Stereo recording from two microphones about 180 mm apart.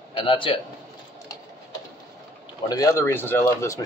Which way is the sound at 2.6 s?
20° left (ahead or behind).